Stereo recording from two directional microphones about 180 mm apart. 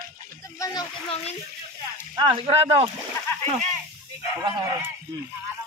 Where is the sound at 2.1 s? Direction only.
30° right (ahead or behind).